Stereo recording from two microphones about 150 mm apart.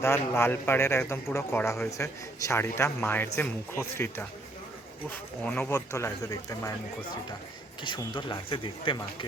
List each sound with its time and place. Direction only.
0.0 s a man's voice: 15° left (ahead or behind)
7.8 s speech: 30° left (ahead or behind)